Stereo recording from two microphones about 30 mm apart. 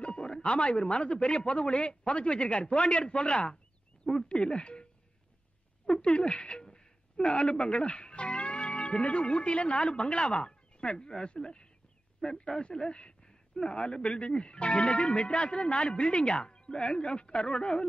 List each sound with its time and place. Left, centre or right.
0.0 s speech: left
5.9 s speech: left
6.6 s a sound: left
7.3 s a man's voice: left